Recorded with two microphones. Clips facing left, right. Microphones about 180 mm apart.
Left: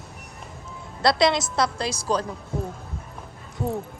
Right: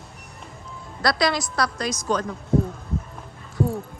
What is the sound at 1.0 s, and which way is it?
A woman's voice, 25° left (ahead or behind).